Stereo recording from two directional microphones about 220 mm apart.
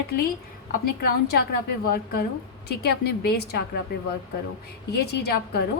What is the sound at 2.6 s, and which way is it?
Speech, 45° left (ahead or behind).